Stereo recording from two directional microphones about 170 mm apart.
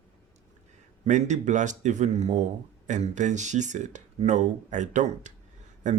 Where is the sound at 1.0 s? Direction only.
45° right (ahead or behind).